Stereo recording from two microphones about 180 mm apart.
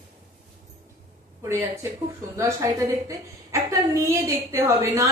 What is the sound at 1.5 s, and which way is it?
Speech, 15° right (ahead or behind).